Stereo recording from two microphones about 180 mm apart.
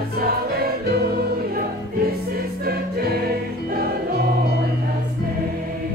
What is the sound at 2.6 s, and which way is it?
Choir, 60° right (ahead or behind).